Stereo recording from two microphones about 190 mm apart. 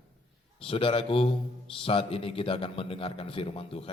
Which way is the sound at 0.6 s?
30° left (ahead or behind).